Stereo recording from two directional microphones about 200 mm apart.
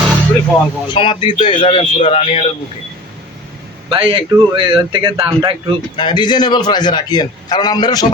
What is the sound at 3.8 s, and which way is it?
Speech, 25° right (ahead or behind).